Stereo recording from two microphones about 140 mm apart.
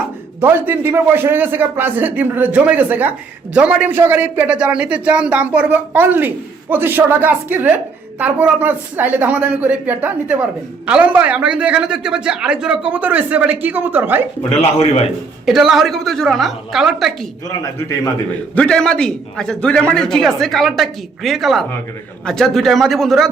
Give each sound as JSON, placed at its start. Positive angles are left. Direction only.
{"t": 0.4, "sound": "a man's voice", "side_deg": -15}
{"t": 14.5, "sound": "a man's voice", "side_deg": 45}
{"t": 15.4, "sound": "a man's voice", "side_deg": -5}
{"t": 17.5, "sound": "a man's voice", "side_deg": 25}
{"t": 18.5, "sound": "a man's voice", "side_deg": 5}